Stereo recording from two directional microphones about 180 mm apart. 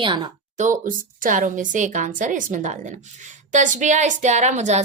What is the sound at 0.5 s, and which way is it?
A woman's voice, 45° right (ahead or behind).